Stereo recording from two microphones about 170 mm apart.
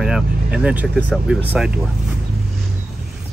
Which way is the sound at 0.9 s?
5° left (ahead or behind).